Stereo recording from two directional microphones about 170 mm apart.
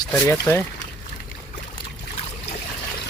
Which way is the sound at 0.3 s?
15° left (ahead or behind).